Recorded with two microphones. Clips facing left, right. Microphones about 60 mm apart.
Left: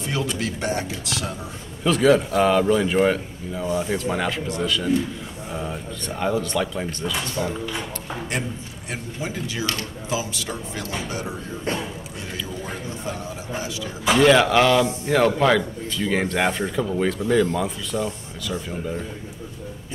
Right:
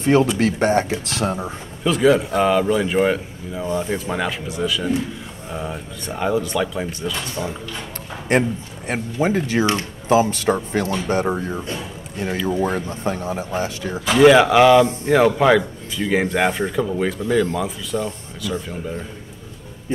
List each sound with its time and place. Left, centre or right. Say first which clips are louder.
0.0 s a man's voice: right 10 dB; right
1.9 s speech: right 1 dB; centre
8.3 s a man's voice: right 14 dB; right
14.0 s speech: right 4 dB; centre